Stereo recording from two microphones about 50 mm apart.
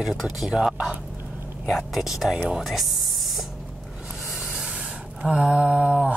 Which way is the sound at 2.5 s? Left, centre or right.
Centre.